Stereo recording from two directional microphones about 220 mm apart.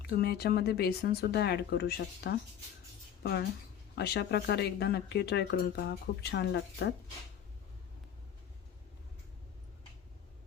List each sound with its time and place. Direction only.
0.0 s speech: 45° left (ahead or behind)
3.9 s speech: 50° left (ahead or behind)